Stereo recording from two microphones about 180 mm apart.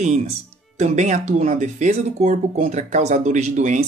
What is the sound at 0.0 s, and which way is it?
Speech, 40° right (ahead or behind).